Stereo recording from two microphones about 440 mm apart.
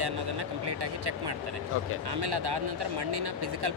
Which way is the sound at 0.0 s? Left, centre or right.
Right.